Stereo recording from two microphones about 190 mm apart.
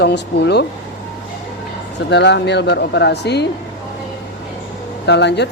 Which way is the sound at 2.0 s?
65° left (ahead or behind).